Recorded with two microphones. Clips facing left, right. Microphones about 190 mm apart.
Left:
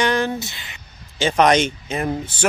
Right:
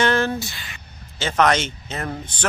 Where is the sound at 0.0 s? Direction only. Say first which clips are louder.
Even; 15° left (ahead or behind).